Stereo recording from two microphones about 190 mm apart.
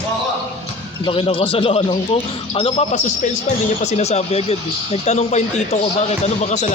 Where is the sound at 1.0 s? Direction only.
30° left (ahead or behind).